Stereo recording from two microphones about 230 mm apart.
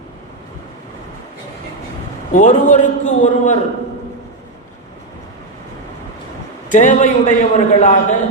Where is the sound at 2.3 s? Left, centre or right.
Left.